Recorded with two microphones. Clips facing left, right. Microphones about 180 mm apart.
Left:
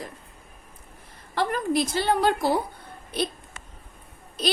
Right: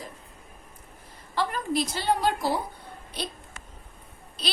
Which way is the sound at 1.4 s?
55° left (ahead or behind).